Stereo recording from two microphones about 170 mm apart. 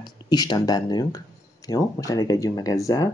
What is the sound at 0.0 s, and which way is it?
Speech, 25° left (ahead or behind).